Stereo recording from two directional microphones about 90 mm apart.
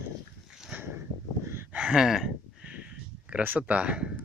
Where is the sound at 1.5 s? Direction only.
25° right (ahead or behind).